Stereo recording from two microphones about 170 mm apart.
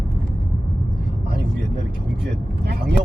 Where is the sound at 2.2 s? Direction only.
75° right (ahead or behind).